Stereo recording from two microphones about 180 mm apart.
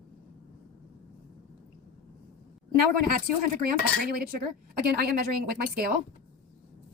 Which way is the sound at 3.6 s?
55° right (ahead or behind).